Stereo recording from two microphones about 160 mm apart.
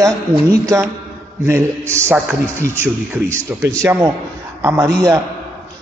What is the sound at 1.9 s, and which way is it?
A man's voice, 15° right (ahead or behind).